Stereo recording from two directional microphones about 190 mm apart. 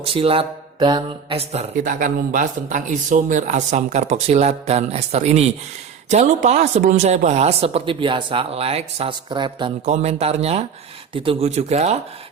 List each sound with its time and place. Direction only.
0.0 s speech: 30° right (ahead or behind)
1.7 s speech: 45° right (ahead or behind); by 9.7 s 25° right (ahead or behind)
9.8 s speech: 35° right (ahead or behind)